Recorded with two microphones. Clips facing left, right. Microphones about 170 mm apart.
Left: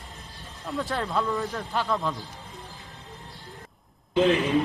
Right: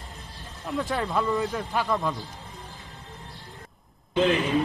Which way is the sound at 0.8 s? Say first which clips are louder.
Right 1 dB; centre (ahead or behind).